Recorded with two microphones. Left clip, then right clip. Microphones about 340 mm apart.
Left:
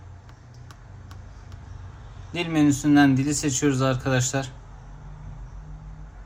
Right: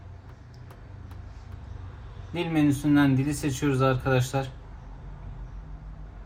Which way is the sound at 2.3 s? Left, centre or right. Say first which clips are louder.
Left 3 dB; centre.